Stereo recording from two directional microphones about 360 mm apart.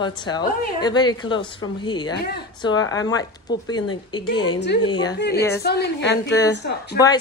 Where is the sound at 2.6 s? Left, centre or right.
Centre.